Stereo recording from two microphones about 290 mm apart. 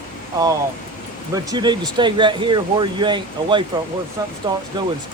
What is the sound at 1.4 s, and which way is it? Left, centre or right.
Speech, centre.